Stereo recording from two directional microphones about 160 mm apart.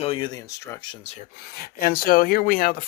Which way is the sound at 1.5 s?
70° left (ahead or behind).